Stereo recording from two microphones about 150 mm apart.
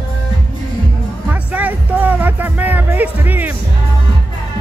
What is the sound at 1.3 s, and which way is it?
Music, 10° right (ahead or behind).